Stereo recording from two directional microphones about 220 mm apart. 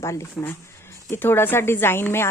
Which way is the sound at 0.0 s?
15° left (ahead or behind).